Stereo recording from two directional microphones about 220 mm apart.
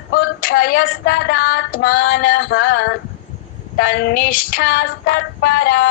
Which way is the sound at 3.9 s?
45° left (ahead or behind).